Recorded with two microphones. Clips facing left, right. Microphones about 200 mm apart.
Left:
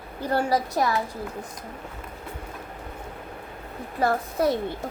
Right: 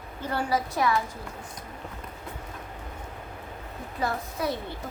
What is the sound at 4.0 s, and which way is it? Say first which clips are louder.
Speech: left 6 dB; 55° left (ahead or behind).